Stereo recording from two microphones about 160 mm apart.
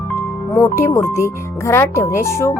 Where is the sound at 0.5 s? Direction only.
15° left (ahead or behind).